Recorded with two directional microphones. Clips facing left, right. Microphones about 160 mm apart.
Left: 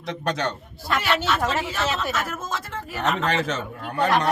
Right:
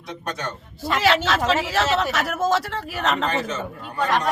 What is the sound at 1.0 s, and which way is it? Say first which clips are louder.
Speech: right 5 dB; 90° right.